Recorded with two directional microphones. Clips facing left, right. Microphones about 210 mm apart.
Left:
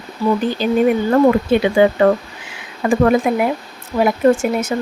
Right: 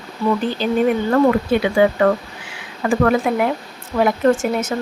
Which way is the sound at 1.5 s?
25° left (ahead or behind).